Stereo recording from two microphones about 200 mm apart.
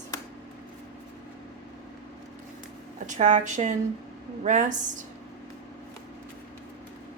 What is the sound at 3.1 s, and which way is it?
Speech, 40° right (ahead or behind).